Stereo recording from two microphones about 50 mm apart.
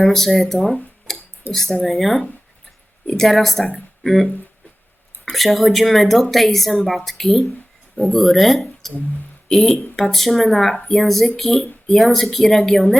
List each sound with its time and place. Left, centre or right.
0.0 s speech: centre